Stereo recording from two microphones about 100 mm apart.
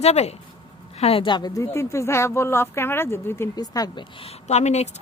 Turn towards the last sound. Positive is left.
turn(degrees=90)